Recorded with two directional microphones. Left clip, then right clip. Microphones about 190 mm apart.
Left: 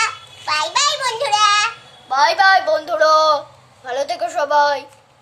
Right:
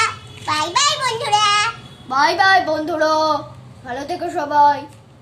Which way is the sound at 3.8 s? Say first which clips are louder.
Left 3 dB; 45° left (ahead or behind).